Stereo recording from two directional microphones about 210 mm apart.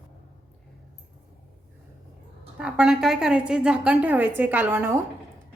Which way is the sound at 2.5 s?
5° right (ahead or behind).